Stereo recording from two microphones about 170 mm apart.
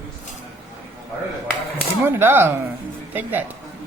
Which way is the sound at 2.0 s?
10° right (ahead or behind).